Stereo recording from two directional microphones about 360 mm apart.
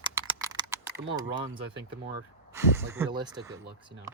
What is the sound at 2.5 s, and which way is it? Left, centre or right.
Speech, centre.